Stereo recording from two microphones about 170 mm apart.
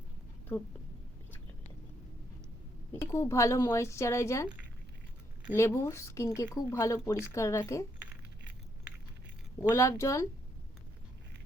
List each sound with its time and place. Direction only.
2.9 s speech: 15° left (ahead or behind)
5.5 s speech: 15° left (ahead or behind)
9.6 s speech: 15° left (ahead or behind)